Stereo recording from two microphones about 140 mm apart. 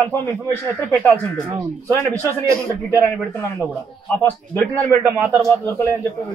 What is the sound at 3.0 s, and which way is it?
Speech, 15° left (ahead or behind).